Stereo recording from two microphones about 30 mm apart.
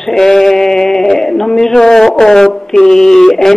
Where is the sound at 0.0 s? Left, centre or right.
Centre.